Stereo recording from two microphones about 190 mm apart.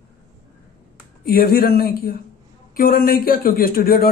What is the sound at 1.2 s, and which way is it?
Speech, 50° left (ahead or behind).